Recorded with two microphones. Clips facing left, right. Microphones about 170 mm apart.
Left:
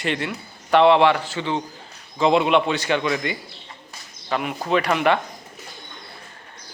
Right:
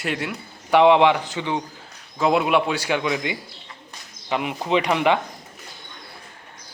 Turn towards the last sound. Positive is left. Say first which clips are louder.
# even
turn(degrees=-15)  # may be behind; listen again after turning